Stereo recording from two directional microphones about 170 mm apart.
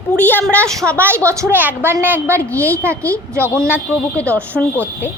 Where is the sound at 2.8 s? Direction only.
15° right (ahead or behind).